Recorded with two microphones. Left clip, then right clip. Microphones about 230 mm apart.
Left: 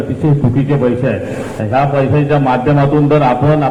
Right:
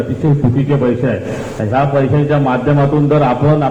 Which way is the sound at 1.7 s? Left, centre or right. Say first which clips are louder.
Left 1 dB; left.